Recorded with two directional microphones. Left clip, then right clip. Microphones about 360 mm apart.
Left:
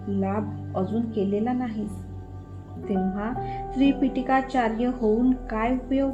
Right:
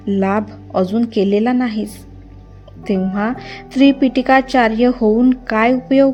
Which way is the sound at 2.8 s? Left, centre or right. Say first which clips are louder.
Right 9 dB; right.